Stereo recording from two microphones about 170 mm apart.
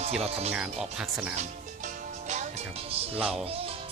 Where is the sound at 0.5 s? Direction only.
5° right (ahead or behind).